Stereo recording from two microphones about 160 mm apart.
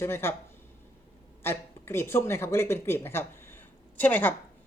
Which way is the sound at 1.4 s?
15° left (ahead or behind).